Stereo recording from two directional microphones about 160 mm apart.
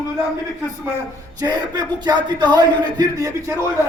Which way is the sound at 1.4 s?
25° right (ahead or behind).